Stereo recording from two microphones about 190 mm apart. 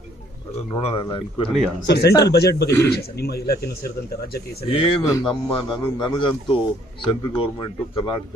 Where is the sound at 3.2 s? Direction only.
55° left (ahead or behind).